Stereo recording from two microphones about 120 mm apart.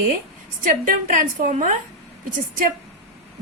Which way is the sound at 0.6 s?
90° right.